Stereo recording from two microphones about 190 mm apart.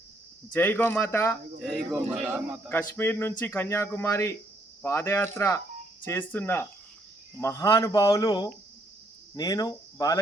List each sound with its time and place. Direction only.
0.5 s speech: 10° left (ahead or behind)
1.6 s a man's voice: 5° right (ahead or behind)
2.9 s speech: 10° left (ahead or behind)